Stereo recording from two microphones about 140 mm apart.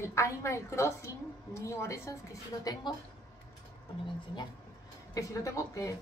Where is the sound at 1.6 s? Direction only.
20° left (ahead or behind).